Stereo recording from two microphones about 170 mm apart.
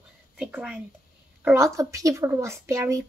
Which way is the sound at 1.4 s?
15° right (ahead or behind).